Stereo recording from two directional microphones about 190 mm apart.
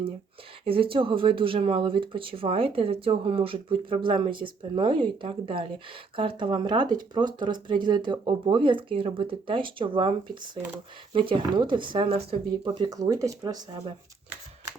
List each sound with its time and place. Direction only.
0.6 s speech: 30° right (ahead or behind)